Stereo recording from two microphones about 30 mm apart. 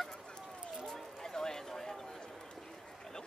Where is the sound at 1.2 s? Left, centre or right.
Centre.